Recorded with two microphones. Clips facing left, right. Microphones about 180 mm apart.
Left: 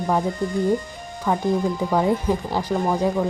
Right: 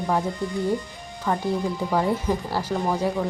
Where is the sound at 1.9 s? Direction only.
15° left (ahead or behind).